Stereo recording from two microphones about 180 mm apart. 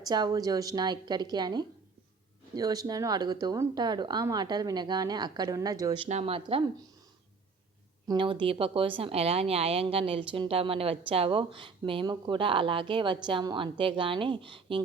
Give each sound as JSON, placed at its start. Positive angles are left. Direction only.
{"t": 0.0, "sound": "speech", "side_deg": -20}
{"t": 6.1, "sound": "a woman's voice", "side_deg": -35}
{"t": 8.0, "sound": "speech", "side_deg": -25}